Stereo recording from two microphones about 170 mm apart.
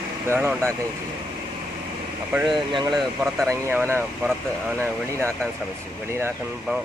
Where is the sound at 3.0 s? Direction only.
Centre (ahead or behind).